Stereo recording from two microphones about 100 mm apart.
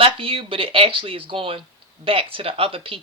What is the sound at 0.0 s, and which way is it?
Speech, 65° right (ahead or behind).